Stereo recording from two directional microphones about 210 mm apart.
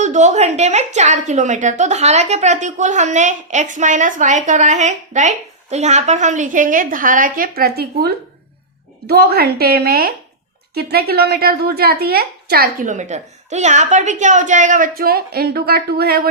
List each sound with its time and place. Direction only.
0.0 s a woman's voice: 35° right (ahead or behind)